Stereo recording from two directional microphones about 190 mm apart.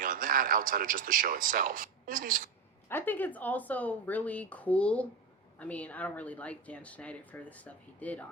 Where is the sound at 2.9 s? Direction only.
10° left (ahead or behind).